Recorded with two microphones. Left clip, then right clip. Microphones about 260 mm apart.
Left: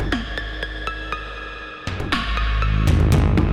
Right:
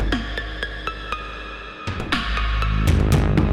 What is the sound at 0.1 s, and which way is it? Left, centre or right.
Music, centre.